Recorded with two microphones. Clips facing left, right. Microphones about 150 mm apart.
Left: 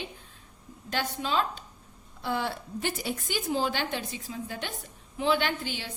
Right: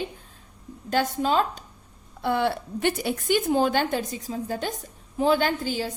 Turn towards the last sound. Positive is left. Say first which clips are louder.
# right 7 dB
turn(degrees=-40)  # may be behind; listen again after turning